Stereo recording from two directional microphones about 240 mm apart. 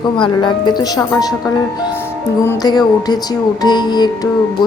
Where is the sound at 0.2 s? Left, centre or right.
Centre.